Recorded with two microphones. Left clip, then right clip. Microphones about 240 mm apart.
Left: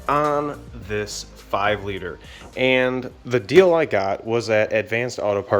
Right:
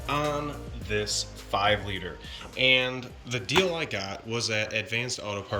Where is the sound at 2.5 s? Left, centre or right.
Centre.